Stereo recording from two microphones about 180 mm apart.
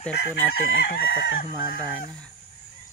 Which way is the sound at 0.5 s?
60° left (ahead or behind).